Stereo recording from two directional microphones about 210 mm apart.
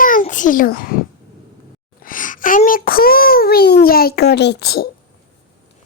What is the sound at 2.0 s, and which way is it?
A child's voice, 40° left (ahead or behind).